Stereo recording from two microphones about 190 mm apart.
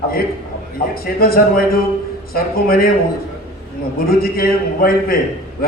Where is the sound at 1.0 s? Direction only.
55° left (ahead or behind).